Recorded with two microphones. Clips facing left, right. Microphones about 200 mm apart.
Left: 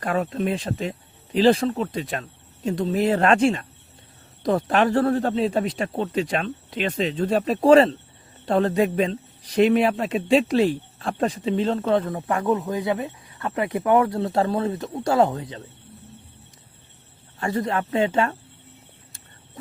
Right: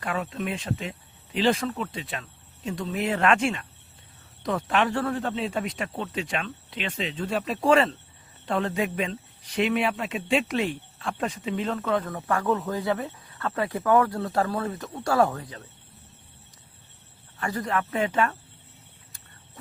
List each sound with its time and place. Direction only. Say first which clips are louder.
0.0 s a man's voice: left 6 dB; 40° left (ahead or behind); by 15.6 s 25° left (ahead or behind)
17.4 s a man's voice: left 4 dB; 25° left (ahead or behind)